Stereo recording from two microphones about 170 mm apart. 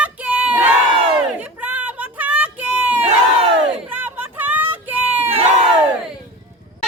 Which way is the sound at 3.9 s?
10° right (ahead or behind).